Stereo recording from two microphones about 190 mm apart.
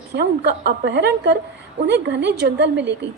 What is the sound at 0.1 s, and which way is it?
A woman's voice, 60° right (ahead or behind).